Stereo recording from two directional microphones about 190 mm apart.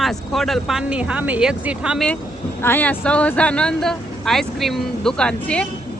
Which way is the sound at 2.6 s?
10° left (ahead or behind).